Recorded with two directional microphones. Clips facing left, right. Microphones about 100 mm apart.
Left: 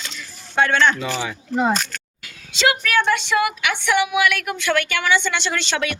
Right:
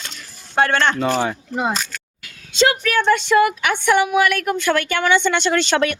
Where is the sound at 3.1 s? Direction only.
40° right (ahead or behind).